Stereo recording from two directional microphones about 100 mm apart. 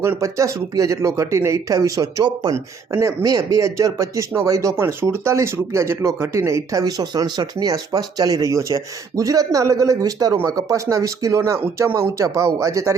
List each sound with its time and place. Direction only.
0.0 s speech: 30° right (ahead or behind)
2.9 s speech: 20° right (ahead or behind)
3.2 s speech: 35° right (ahead or behind)